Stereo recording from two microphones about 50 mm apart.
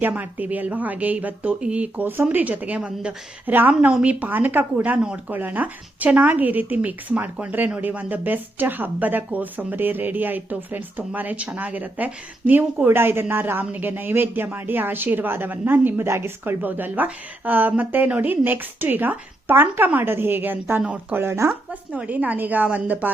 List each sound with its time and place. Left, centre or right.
0.0 s a woman's voice: right
3.4 s a woman's voice: right
3.7 s speech: right
4.3 s a woman's voice: right
4.9 s speech: centre
5.3 s a woman's voice: right
16.0 s a woman's voice: right
20.8 s speech: right
21.4 s speech: right
21.9 s a woman's voice: right